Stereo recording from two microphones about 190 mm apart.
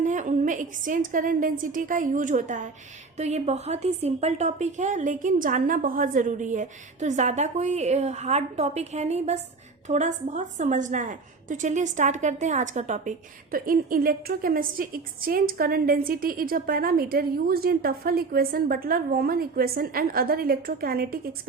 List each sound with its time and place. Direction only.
0.0 s a woman's voice: 40° right (ahead or behind)